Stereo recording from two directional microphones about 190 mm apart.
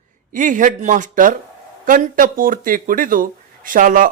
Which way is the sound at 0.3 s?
40° right (ahead or behind).